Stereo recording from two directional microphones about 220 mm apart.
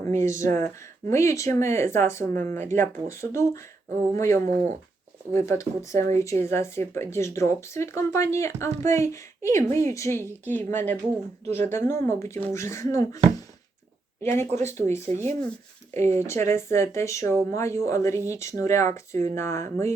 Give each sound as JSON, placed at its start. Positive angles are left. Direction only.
{"t": 0.1, "sound": "speech", "side_deg": -35}
{"t": 0.3, "sound": "speech", "side_deg": 15}
{"t": 11.4, "sound": "speech", "side_deg": -30}
{"t": 11.7, "sound": "speech", "side_deg": 15}
{"t": 14.3, "sound": "speech", "side_deg": 10}
{"t": 15.1, "sound": "speech", "side_deg": -30}
{"t": 16.1, "sound": "speech", "side_deg": 10}